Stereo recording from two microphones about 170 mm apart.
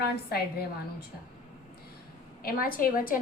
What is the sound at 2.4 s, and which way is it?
Speech, 60° left (ahead or behind).